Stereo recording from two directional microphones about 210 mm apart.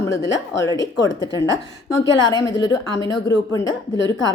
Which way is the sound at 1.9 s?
20° left (ahead or behind).